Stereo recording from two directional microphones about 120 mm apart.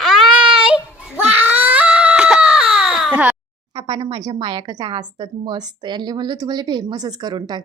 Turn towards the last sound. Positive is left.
turn(degrees=-35)  # may be behind; listen again after turning